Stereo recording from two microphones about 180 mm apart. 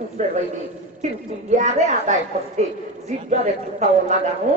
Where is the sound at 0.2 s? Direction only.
40° right (ahead or behind).